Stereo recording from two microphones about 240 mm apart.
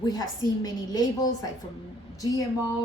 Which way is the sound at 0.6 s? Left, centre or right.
Centre.